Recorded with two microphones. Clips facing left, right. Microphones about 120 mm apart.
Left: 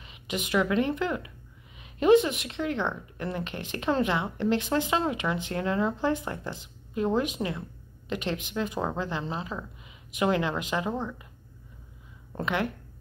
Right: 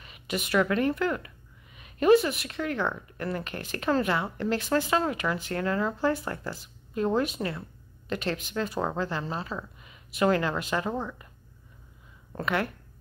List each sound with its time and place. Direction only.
0.0 s speech: 20° left (ahead or behind)
12.4 s speech: 20° left (ahead or behind)